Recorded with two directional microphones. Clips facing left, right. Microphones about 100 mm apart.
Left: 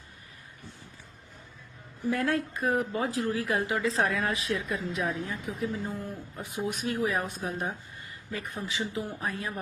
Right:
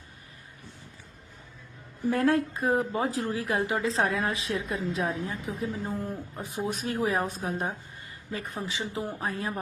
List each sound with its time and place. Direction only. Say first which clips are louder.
2.0 s speech: right 4 dB; 35° right (ahead or behind)